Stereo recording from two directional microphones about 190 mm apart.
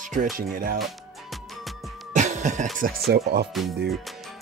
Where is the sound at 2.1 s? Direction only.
40° right (ahead or behind).